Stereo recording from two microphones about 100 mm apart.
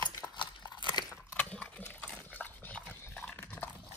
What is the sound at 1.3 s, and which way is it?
Dog, 10° left (ahead or behind).